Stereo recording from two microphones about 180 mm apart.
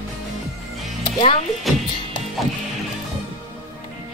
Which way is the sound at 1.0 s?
30° left (ahead or behind).